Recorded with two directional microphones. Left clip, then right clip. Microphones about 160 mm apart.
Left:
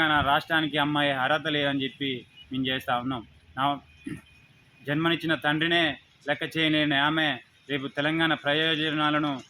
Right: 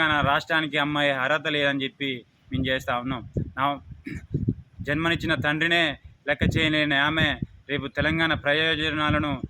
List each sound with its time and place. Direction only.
0.0 s speech: 40° right (ahead or behind)
4.9 s speech: 35° right (ahead or behind)